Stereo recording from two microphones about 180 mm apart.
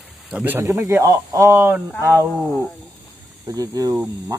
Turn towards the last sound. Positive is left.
turn(degrees=-20)  # may be behind; listen again after turning